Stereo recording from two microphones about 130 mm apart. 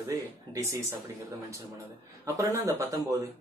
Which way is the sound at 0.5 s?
25° right (ahead or behind).